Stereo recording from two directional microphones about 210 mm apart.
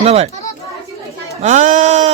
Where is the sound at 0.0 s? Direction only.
30° right (ahead or behind).